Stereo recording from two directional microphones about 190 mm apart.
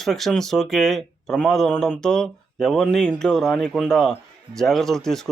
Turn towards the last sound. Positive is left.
turn(degrees=0)  # may be behind; listen again after turning